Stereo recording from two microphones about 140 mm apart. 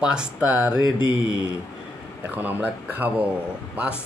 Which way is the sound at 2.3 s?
10° right (ahead or behind).